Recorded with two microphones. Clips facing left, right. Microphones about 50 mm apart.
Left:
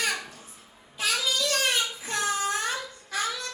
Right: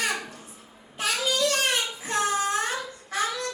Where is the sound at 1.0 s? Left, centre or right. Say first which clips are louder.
Right 2 dB; right.